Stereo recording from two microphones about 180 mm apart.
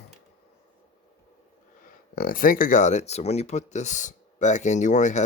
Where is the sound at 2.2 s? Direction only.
55° left (ahead or behind).